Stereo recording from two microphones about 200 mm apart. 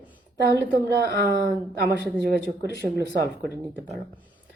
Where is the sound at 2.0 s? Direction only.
50° right (ahead or behind).